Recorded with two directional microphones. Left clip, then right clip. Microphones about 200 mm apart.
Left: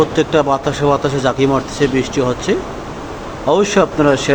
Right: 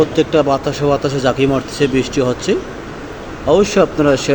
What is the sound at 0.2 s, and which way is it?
Speech, 10° right (ahead or behind).